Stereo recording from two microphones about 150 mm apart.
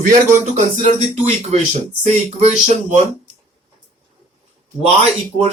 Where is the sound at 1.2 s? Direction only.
45° right (ahead or behind).